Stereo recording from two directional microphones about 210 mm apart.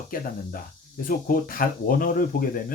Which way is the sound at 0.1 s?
40° left (ahead or behind).